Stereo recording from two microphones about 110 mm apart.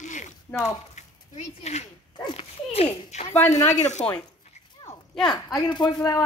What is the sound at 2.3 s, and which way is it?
Speech, 65° left (ahead or behind).